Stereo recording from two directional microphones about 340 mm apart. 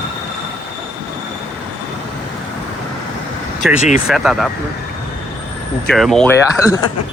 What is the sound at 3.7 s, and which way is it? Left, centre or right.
Speech, left.